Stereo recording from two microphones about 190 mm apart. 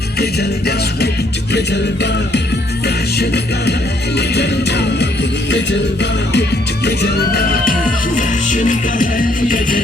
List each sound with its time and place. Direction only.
0.2 s music: 60° left (ahead or behind)
6.8 s music: 55° left (ahead or behind)
8.1 s music: 40° left (ahead or behind)